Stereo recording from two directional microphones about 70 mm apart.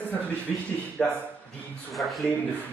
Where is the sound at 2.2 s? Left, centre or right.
Left.